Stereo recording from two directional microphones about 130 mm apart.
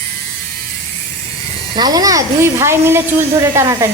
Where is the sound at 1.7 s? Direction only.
30° right (ahead or behind).